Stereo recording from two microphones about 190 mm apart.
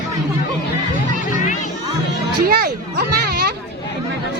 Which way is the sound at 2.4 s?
55° right (ahead or behind).